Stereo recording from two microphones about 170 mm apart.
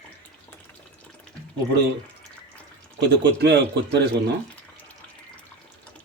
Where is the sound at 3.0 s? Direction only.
80° right.